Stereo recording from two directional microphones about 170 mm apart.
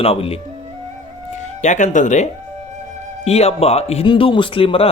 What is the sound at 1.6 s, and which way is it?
Speech, 45° left (ahead or behind).